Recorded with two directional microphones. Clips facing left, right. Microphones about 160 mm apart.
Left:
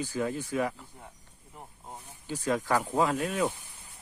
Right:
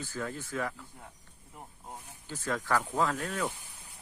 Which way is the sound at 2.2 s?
15° left (ahead or behind).